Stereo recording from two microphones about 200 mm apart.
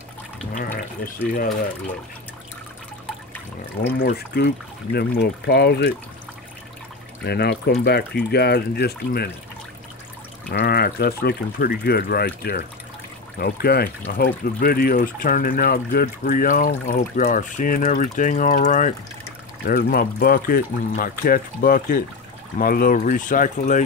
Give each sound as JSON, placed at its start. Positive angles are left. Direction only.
{"t": 1.0, "sound": "speech", "side_deg": 45}
{"t": 4.0, "sound": "speech", "side_deg": 55}
{"t": 7.2, "sound": "speech", "side_deg": 55}
{"t": 10.5, "sound": "speech", "side_deg": 50}
{"t": 13.4, "sound": "speech", "side_deg": 50}